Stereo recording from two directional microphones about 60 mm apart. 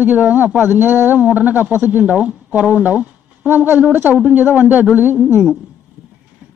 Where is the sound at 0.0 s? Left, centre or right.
Right.